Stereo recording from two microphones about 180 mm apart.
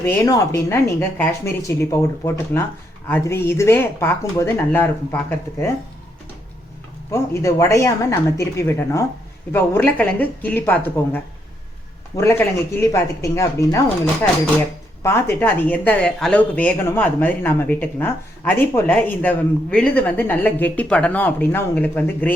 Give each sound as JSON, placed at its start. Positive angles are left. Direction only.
{"t": 0.0, "sound": "speech", "side_deg": 15}
{"t": 7.1, "sound": "speech", "side_deg": 15}
{"t": 15.0, "sound": "speech", "side_deg": 15}